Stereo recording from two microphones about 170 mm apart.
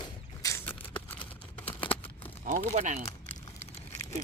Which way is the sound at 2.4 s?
50° right (ahead or behind).